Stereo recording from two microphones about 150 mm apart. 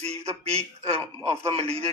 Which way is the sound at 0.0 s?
45° right (ahead or behind).